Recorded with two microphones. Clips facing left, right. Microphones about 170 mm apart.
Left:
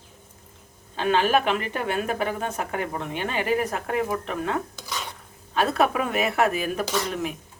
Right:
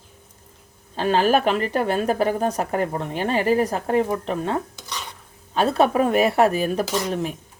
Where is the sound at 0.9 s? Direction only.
35° right (ahead or behind).